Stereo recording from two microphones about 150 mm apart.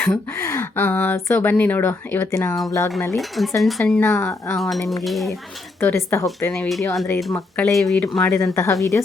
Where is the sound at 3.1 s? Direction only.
Centre (ahead or behind).